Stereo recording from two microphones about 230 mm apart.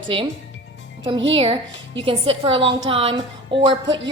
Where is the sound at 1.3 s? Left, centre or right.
Right.